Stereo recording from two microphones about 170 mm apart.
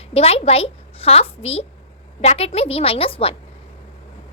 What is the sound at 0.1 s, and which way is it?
A child's voice, 35° left (ahead or behind).